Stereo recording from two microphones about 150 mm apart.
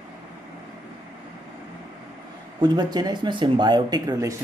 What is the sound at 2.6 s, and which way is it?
Speech, 30° right (ahead or behind).